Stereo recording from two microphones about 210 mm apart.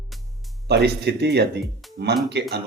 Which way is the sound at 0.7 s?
55° right (ahead or behind).